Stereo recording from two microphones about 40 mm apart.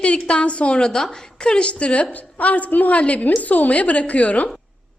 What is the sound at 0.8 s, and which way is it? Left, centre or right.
A woman's voice, centre.